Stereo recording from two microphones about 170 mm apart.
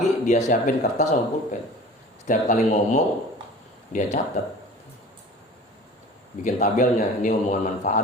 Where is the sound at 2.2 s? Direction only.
45° left (ahead or behind).